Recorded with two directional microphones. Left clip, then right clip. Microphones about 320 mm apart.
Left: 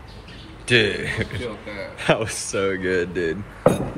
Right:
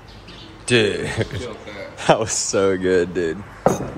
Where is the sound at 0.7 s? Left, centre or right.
Centre.